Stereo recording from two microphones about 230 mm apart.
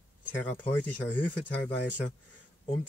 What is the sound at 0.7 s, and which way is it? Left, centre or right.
Speech, centre.